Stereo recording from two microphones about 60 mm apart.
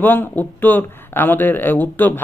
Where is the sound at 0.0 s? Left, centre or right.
Left.